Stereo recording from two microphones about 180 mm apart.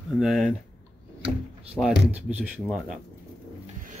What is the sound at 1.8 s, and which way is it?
Speech, 10° left (ahead or behind).